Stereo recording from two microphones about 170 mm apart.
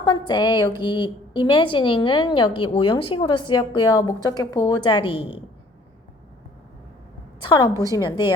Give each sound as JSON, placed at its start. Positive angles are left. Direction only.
{"t": 0.0, "sound": "a woman's voice", "side_deg": 25}
{"t": 7.4, "sound": "a woman's voice", "side_deg": 30}
{"t": 7.7, "sound": "a woman's voice", "side_deg": -20}
{"t": 7.9, "sound": "a woman's voice", "side_deg": 25}